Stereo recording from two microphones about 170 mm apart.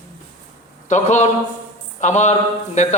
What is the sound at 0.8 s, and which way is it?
A man's voice, 45° left (ahead or behind).